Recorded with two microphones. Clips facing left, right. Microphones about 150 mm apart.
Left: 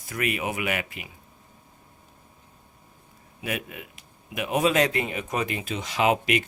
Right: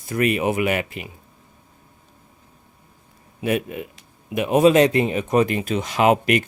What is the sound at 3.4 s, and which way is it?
Speech, 30° right (ahead or behind).